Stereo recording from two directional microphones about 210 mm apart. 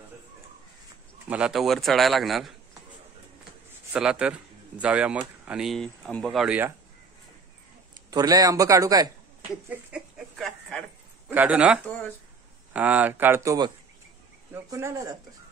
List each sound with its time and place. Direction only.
1.3 s a man's voice: 5° right (ahead or behind)
3.9 s a man's voice: 5° right (ahead or behind)
7.9 s a man's voice: 20° right (ahead or behind)
9.7 s a sound: 5° right (ahead or behind)
11.2 s speech: 10° right (ahead or behind)